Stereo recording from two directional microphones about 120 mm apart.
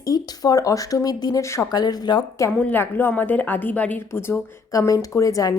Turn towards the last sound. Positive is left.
turn(degrees=30)  # may be behind; listen again after turning